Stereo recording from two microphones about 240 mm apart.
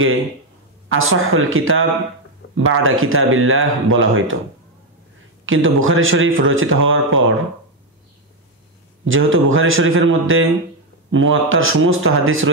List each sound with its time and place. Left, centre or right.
0.9 s a man's voice: right
5.4 s a man's voice: right
9.0 s a man's voice: right